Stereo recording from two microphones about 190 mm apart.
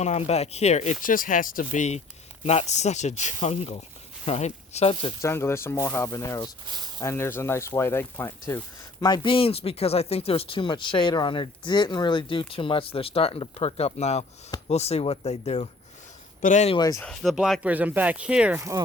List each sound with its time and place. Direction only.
0.0 s speech: 35° left (ahead or behind)
5.2 s speech: 15° left (ahead or behind); by 16.7 s 40° left (ahead or behind)
16.7 s speech: 20° left (ahead or behind)
17.0 s speech: 5° left (ahead or behind); by 18.8 s 10° right (ahead or behind)